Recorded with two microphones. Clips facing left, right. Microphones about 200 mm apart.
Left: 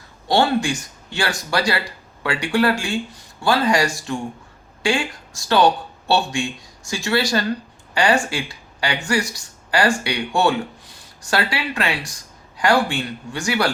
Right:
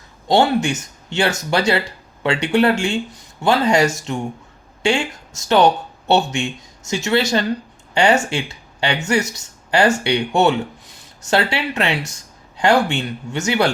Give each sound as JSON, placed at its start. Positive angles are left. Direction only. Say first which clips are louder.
{"t": 0.3, "sound": "speech", "louder": "right 2 dB", "side_deg": -20}